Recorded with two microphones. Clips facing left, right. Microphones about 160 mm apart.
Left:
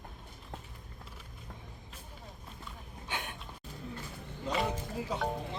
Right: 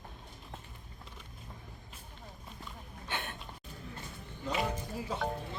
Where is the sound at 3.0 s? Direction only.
10° left (ahead or behind).